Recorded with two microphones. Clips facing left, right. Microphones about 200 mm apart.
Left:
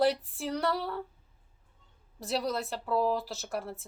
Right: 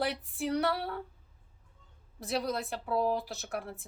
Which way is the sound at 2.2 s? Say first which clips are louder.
Left 1 dB; centre (ahead or behind).